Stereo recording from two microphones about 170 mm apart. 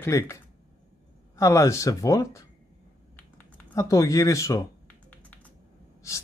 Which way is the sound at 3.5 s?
20° left (ahead or behind).